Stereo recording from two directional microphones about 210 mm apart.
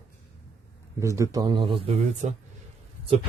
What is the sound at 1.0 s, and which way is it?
Speech, 15° right (ahead or behind).